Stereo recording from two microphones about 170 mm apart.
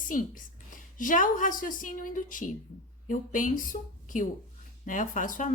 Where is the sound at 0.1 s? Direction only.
50° left (ahead or behind).